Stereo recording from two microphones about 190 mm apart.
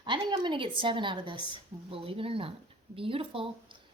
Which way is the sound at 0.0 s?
25° right (ahead or behind).